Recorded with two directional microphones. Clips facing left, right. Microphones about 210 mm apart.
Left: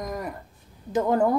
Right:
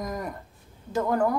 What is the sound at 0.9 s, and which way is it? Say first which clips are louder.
Speech: left 3 dB; 20° left (ahead or behind).